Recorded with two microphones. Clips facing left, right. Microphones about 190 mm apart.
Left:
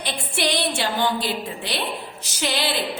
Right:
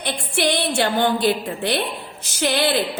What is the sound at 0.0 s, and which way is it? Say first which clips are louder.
A woman's voice: right 3 dB; 55° right (ahead or behind).